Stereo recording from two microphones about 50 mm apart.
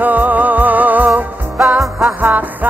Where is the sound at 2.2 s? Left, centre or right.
Right.